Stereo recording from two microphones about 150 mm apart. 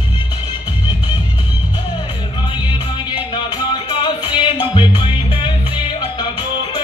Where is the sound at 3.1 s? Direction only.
30° left (ahead or behind).